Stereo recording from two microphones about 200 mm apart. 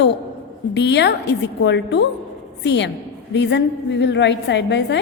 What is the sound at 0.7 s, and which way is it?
A woman's voice, 60° left (ahead or behind).